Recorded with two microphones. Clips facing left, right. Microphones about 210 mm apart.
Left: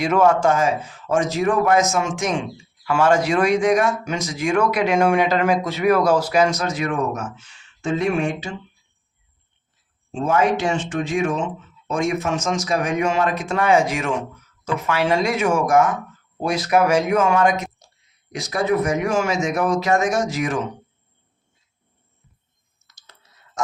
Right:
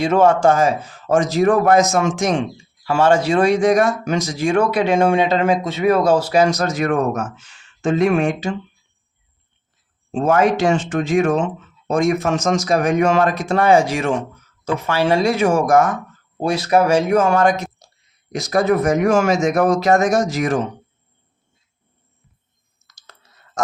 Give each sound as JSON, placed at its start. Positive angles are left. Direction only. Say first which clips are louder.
{"t": 0.0, "sound": "a man's voice", "louder": "right 3 dB", "side_deg": -30}
{"t": 10.3, "sound": "speech", "louder": "right 3 dB", "side_deg": -40}